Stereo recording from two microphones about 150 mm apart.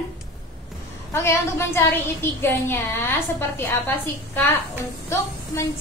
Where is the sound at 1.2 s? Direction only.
20° left (ahead or behind).